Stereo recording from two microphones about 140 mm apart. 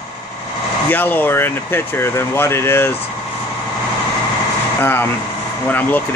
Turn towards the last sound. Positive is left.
turn(degrees=15)  # may be behind; listen again after turning